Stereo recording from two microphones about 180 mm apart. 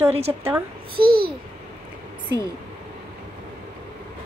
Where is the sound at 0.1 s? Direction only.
35° right (ahead or behind).